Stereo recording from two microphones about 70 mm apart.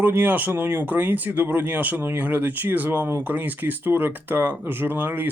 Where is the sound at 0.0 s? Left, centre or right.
Right.